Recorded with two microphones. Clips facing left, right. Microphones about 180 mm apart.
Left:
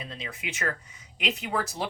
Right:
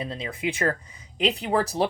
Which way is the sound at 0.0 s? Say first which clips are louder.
Right 9 dB; 30° right (ahead or behind).